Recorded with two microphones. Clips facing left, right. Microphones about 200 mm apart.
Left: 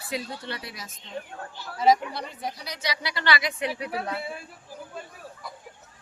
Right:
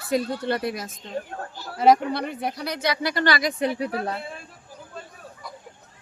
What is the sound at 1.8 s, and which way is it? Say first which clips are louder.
Speech: right 4 dB; 60° right (ahead or behind).